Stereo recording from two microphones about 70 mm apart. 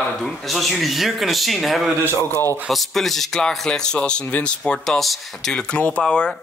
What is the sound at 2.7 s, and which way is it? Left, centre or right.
A man's voice, centre.